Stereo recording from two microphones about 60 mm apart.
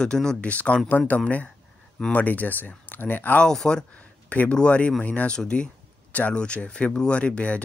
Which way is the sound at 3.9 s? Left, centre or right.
Left.